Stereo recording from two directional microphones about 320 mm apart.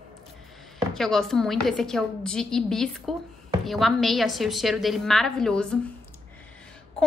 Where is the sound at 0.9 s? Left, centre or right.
Centre.